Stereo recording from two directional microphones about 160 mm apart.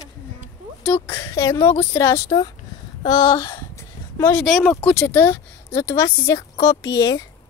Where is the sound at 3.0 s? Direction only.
30° left (ahead or behind).